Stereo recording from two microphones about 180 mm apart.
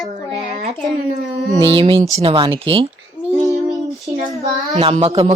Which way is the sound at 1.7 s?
30° right (ahead or behind).